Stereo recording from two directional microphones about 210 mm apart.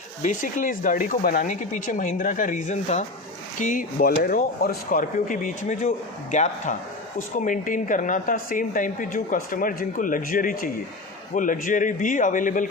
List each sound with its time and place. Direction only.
0.2 s speech: 40° left (ahead or behind)